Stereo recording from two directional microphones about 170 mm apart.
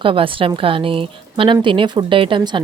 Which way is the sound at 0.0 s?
30° right (ahead or behind).